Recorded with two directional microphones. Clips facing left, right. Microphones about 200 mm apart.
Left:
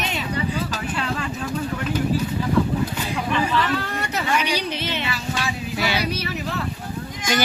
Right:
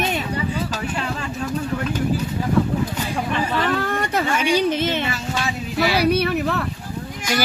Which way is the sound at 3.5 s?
50° right (ahead or behind).